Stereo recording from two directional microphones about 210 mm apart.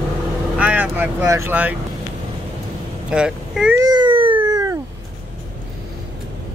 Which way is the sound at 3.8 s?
20° right (ahead or behind).